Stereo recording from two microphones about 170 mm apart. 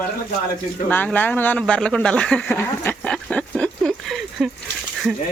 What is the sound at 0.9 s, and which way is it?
Speech, 10° left (ahead or behind).